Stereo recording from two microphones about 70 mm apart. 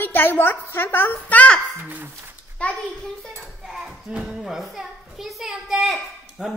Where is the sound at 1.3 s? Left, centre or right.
Left.